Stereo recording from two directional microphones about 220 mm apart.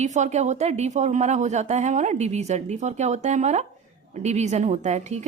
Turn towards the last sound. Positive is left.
turn(degrees=-30)  # may be behind; listen again after turning